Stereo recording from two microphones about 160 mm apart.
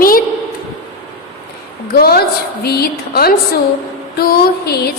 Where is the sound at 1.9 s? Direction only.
75° left (ahead or behind).